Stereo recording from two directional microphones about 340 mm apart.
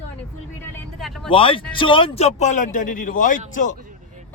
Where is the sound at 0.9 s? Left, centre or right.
Centre.